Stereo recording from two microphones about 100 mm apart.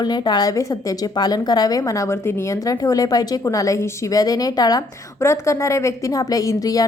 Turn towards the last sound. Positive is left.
turn(degrees=35)  # may be behind; listen again after turning